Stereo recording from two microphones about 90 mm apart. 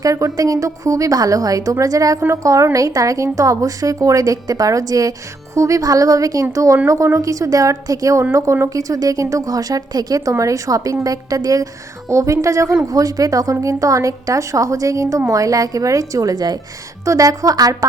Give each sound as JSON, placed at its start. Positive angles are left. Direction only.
{"t": 0.0, "sound": "a woman's voice", "side_deg": -40}